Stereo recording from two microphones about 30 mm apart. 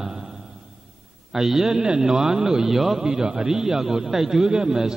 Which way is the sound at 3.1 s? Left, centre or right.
Right.